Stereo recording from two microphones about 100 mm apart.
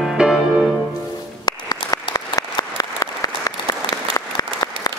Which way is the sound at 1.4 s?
40° left (ahead or behind).